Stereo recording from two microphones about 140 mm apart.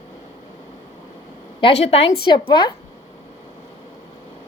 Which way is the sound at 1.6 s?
45° left (ahead or behind).